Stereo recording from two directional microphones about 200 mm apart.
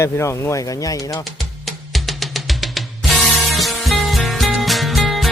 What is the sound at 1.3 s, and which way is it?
Music, centre (ahead or behind).